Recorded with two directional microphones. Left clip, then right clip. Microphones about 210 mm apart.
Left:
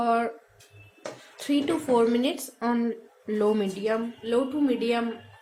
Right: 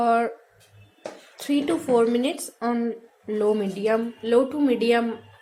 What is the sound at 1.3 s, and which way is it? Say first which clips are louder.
A woman's voice: right 2 dB; 5° right (ahead or behind).